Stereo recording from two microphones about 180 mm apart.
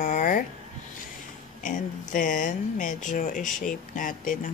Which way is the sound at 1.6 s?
45° left (ahead or behind).